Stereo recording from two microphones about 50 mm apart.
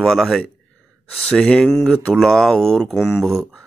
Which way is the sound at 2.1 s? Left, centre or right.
Centre.